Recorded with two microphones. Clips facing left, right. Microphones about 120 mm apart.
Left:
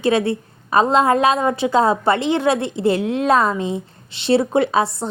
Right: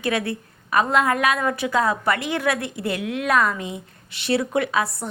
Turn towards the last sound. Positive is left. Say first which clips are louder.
# left 5 dB
turn(degrees=25)  # may be behind; listen again after turning